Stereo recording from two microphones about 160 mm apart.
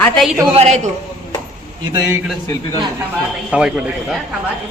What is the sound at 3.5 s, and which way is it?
Speech, 5° right (ahead or behind).